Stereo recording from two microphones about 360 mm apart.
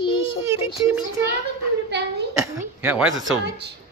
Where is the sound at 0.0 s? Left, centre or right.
Centre.